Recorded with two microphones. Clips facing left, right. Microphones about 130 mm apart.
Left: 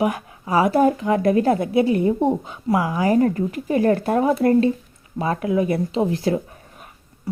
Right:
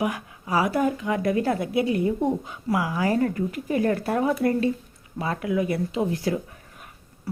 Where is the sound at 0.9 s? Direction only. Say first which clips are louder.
Left 6 dB; 40° left (ahead or behind); by 3.2 s 20° left (ahead or behind).